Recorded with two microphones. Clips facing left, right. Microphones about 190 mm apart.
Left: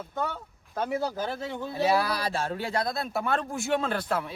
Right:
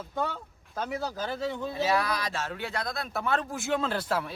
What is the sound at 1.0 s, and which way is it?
Speech, 10° left (ahead or behind).